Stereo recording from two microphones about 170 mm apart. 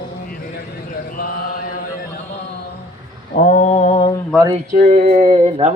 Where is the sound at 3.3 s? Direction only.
50° left (ahead or behind).